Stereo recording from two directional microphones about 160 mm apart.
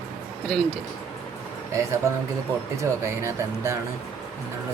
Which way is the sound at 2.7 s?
15° right (ahead or behind).